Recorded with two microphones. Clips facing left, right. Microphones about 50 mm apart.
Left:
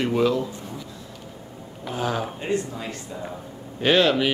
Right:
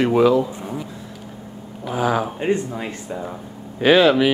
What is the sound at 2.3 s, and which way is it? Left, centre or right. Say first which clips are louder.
Speech: right 5 dB; right.